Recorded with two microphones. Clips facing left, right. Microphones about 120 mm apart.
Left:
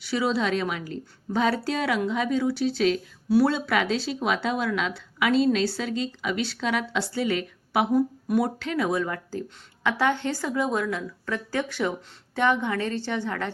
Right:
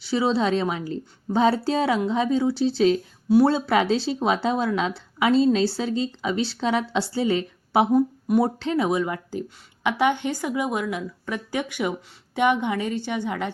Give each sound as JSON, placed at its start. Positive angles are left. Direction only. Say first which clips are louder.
{"t": 0.0, "sound": "a woman's voice", "louder": "right 3 dB", "side_deg": -30}